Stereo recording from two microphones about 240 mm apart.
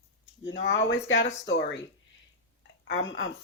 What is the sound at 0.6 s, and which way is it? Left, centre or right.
Speech, left.